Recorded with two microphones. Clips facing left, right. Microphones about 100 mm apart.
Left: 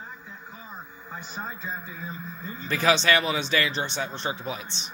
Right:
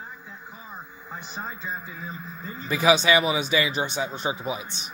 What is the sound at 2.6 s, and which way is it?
Speech, 10° right (ahead or behind).